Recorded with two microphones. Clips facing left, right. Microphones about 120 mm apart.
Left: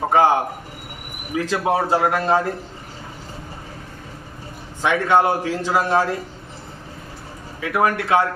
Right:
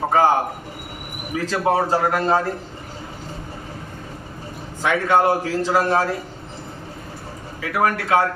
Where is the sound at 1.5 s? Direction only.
10° left (ahead or behind).